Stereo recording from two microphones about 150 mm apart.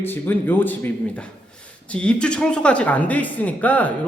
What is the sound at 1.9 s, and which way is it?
Speech, 5° left (ahead or behind).